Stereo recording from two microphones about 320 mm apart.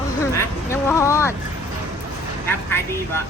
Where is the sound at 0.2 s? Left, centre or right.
Centre.